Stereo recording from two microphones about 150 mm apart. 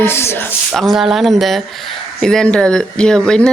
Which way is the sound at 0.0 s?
15° left (ahead or behind).